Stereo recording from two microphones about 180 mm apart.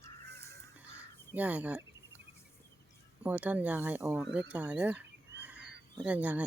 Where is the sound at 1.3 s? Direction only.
10° right (ahead or behind).